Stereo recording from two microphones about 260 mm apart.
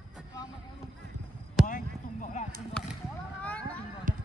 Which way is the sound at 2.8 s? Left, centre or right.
Centre.